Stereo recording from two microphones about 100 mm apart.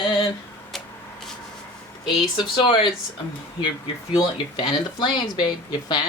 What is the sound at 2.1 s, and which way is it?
Speech, 50° left (ahead or behind).